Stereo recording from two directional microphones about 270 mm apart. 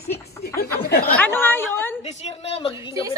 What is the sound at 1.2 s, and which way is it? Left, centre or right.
Speech, centre.